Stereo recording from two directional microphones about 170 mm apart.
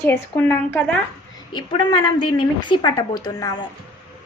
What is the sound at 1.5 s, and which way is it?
A woman's voice, 30° left (ahead or behind).